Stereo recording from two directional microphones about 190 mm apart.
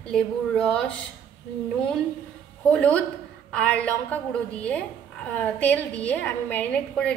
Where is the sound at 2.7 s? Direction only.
5° left (ahead or behind).